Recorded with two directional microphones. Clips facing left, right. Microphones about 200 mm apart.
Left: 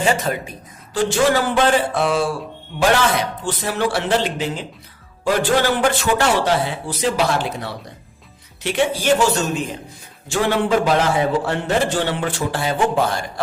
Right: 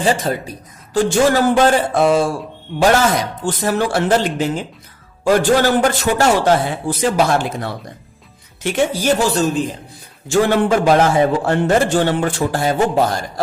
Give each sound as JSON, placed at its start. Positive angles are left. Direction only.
{"t": 0.0, "sound": "a woman's voice", "side_deg": -35}
{"t": 3.4, "sound": "a man's voice", "side_deg": -45}
{"t": 10.2, "sound": "a man's voice", "side_deg": -45}